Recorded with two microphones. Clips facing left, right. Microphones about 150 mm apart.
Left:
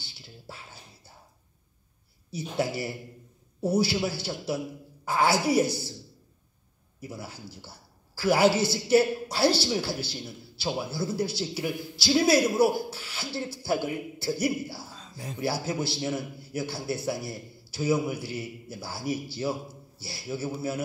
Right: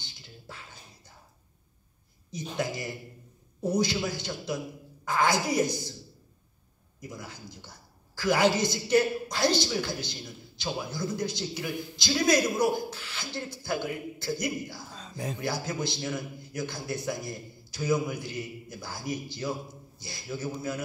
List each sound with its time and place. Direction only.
0.0 s music: 10° left (ahead or behind)
2.7 s a man's voice: 10° left (ahead or behind)
7.0 s a man's voice: 10° left (ahead or behind)
15.0 s a sound: 85° right
15.4 s a man's voice: 10° left (ahead or behind)